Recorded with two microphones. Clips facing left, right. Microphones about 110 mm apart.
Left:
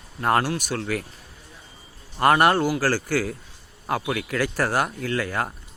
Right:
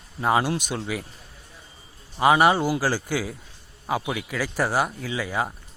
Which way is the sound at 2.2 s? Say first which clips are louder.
Even; 5° right (ahead or behind).